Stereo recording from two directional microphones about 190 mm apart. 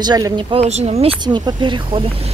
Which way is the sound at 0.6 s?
35° right (ahead or behind).